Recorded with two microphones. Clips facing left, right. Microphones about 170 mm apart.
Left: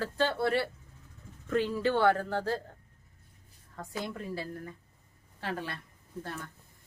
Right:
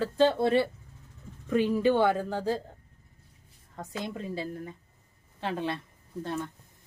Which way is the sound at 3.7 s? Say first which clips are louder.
Right 2 dB; 20° right (ahead or behind).